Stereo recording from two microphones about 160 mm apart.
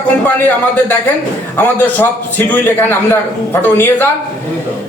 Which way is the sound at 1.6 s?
10° left (ahead or behind).